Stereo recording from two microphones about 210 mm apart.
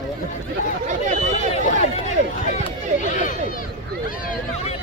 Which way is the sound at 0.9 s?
35° right (ahead or behind).